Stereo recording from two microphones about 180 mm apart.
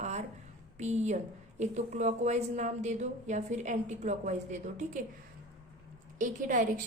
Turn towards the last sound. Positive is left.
turn(degrees=-45)  # may be behind; listen again after turning